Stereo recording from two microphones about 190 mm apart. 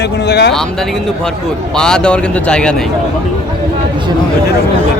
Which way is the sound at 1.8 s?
5° left (ahead or behind).